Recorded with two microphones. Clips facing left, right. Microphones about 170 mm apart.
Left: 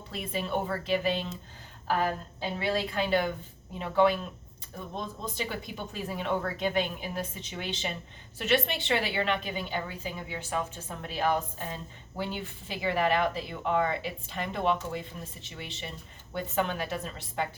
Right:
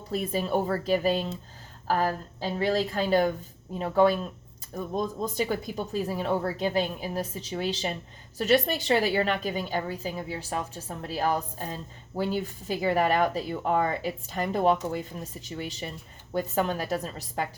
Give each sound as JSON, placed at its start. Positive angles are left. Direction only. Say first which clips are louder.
{"t": 0.1, "sound": "a woman's voice", "louder": "right 5 dB", "side_deg": -40}